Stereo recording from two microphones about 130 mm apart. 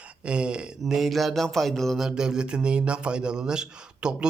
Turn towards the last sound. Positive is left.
turn(degrees=-5)  # may be behind; listen again after turning